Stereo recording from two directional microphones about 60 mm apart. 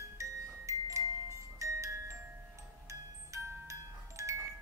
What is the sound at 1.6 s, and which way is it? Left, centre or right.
Glockenspiel, right.